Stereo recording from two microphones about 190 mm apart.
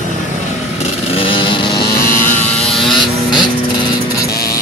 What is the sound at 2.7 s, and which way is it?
Vehicle, centre (ahead or behind).